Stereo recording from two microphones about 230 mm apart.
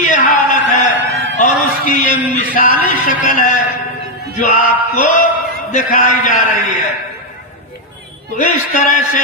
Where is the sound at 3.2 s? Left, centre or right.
Left.